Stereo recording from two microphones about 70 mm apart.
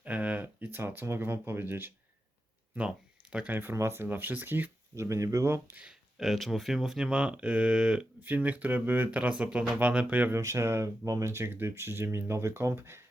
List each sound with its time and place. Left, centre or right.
0.0 s a sound: centre
0.8 s speech: right
2.7 s speech: centre
3.5 s speech: right
4.9 s speech: right
5.5 s speech: right
5.9 s speech: centre
8.2 s speech: right
10.3 s speech: right